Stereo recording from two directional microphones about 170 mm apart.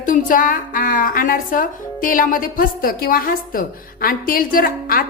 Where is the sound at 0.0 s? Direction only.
50° left (ahead or behind).